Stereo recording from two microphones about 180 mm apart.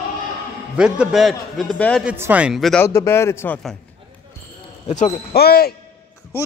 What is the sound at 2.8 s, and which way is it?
Speech, 15° left (ahead or behind).